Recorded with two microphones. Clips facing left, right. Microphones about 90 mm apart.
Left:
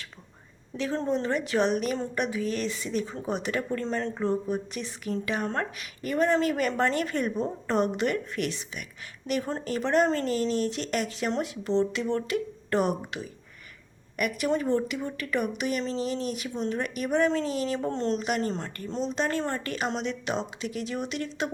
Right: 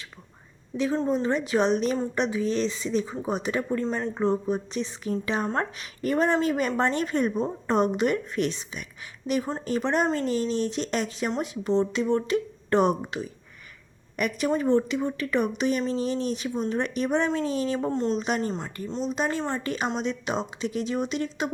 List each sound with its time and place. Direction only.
1.0 s a woman's voice: 20° right (ahead or behind)
18.5 s speech: 5° right (ahead or behind)
19.1 s a woman's voice: 15° right (ahead or behind)